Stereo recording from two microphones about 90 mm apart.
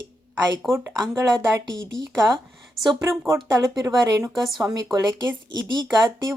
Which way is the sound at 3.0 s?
30° right (ahead or behind).